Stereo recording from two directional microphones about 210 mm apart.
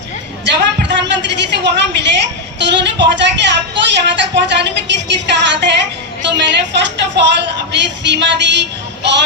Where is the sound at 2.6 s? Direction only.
55° right (ahead or behind).